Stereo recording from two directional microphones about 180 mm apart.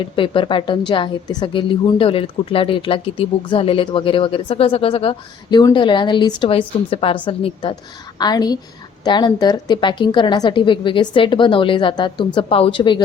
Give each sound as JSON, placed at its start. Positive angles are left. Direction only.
{"t": 0.0, "sound": "a woman's voice", "side_deg": 30}